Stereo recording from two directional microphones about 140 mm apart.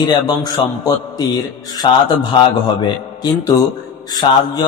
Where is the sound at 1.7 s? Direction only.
30° left (ahead or behind).